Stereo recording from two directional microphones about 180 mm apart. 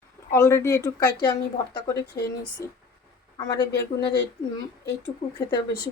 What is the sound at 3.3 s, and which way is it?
Speech, 25° left (ahead or behind).